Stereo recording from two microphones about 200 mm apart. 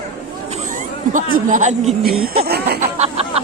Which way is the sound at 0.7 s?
40° right (ahead or behind).